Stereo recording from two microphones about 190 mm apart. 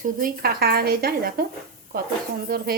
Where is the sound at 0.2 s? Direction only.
55° right (ahead or behind).